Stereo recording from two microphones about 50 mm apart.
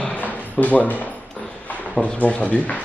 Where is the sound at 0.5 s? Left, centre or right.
Left.